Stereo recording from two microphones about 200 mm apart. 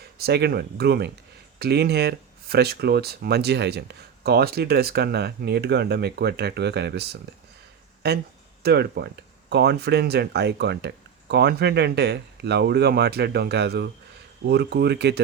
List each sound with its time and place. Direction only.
0.2 s speech: 55° right (ahead or behind)